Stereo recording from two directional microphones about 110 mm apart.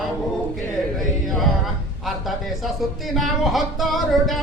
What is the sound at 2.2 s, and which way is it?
Speech, centre (ahead or behind).